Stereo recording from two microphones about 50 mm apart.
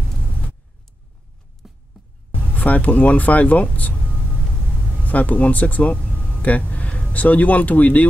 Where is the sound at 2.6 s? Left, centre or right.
Left.